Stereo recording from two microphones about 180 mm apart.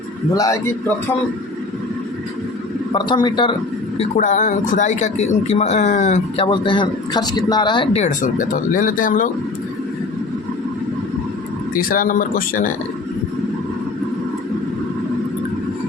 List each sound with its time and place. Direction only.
0.3 s a man's voice: 20° left (ahead or behind)
2.9 s a man's voice: 25° left (ahead or behind)
3.9 s speech: 40° left (ahead or behind)
8.0 s speech: 45° left (ahead or behind)
11.8 s speech: 50° left (ahead or behind)